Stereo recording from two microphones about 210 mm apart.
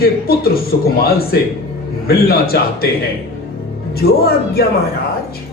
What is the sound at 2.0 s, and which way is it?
Speech, 45° left (ahead or behind).